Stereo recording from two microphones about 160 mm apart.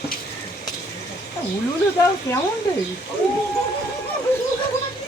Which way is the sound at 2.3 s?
20° left (ahead or behind).